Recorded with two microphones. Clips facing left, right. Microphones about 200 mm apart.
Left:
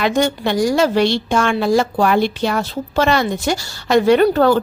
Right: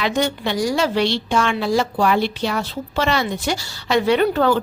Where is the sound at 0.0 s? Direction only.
45° left (ahead or behind).